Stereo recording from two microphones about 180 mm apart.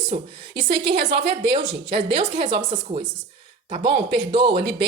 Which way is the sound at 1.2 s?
70° right (ahead or behind).